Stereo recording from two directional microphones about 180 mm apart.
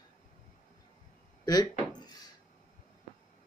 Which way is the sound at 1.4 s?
20° left (ahead or behind).